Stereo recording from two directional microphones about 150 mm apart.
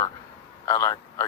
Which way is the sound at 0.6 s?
20° left (ahead or behind).